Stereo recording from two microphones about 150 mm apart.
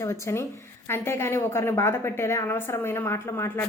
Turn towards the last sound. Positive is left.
turn(degrees=15)  # may be behind; listen again after turning